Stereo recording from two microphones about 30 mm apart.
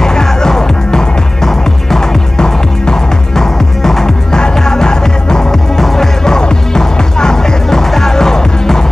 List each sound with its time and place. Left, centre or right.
0.0 s music: centre
5.8 s music: centre
6.2 s music: left